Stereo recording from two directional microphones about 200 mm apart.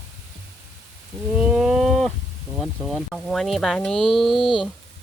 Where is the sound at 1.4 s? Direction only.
Centre (ahead or behind).